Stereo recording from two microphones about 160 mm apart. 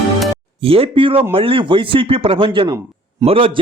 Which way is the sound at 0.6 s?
35° right (ahead or behind).